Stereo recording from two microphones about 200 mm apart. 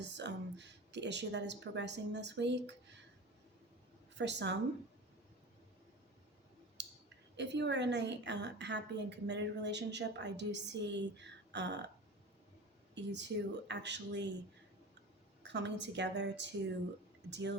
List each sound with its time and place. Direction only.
0.0 s a woman's voice: 60° right (ahead or behind)
4.2 s a woman's voice: 60° right (ahead or behind)
6.8 s a sound: 60° right (ahead or behind)
7.3 s a woman's voice: 60° right (ahead or behind)
12.9 s a woman's voice: 60° right (ahead or behind)
15.4 s a woman's voice: 60° right (ahead or behind)